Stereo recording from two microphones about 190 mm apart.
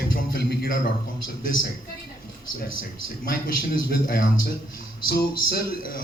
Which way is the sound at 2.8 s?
50° left (ahead or behind).